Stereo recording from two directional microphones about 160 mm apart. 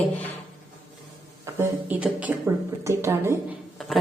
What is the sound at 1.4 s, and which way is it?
Speech, 15° right (ahead or behind).